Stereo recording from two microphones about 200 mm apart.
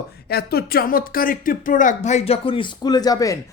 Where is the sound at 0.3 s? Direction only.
50° left (ahead or behind).